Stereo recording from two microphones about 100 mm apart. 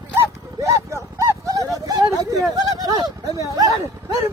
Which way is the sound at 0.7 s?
30° right (ahead or behind).